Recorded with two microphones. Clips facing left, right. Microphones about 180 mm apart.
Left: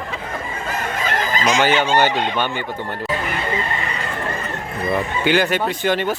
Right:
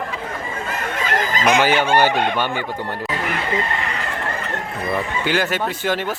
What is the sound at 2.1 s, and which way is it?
Chicken, 55° right (ahead or behind).